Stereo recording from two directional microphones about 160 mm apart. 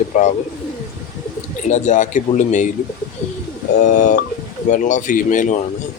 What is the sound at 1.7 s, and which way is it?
Speech, 45° left (ahead or behind).